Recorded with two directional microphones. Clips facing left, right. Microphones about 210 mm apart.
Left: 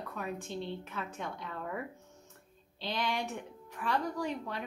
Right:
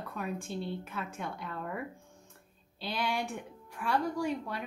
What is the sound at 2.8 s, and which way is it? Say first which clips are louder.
A woman's voice: right 1 dB; 10° right (ahead or behind).